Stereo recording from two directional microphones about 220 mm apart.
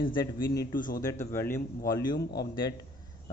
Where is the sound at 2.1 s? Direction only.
45° left (ahead or behind).